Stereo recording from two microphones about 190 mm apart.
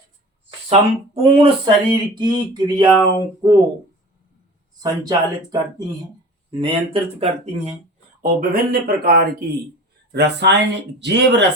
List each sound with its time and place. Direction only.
0.7 s speech: 30° right (ahead or behind)
4.8 s speech: 20° right (ahead or behind)
8.2 s speech: 50° right (ahead or behind); by 11.4 s 65° right (ahead or behind)